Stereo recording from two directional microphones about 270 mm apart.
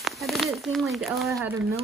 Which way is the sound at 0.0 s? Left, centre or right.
Centre.